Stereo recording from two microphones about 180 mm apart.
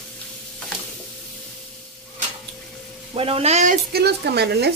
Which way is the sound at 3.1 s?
30° right (ahead or behind).